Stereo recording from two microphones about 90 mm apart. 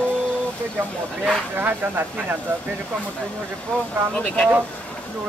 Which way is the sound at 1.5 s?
20° right (ahead or behind).